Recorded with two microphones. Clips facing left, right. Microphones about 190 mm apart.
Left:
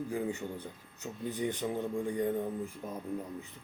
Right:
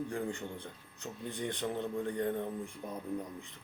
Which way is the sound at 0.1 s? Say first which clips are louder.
Left 3 dB; 5° left (ahead or behind).